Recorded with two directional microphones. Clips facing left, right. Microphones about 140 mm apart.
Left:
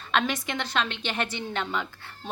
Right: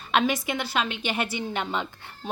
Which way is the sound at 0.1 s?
10° right (ahead or behind).